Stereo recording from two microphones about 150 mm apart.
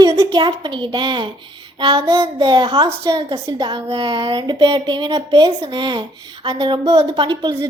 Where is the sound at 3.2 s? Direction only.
35° right (ahead or behind).